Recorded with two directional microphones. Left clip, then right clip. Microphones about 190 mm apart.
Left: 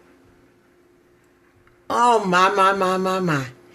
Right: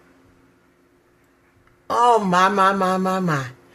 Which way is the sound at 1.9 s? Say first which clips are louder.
Right 1 dB; 10° left (ahead or behind).